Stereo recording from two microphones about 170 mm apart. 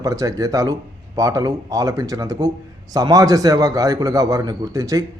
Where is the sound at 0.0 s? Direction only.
20° right (ahead or behind).